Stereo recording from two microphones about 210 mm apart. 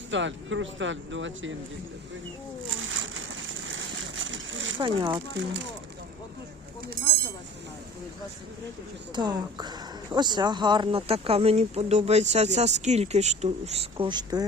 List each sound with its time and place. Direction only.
0.1 s speech: 60° right (ahead or behind)
2.6 s a sound: 65° right (ahead or behind)
4.8 s speech: 25° right (ahead or behind)
9.1 s speech: 20° right (ahead or behind)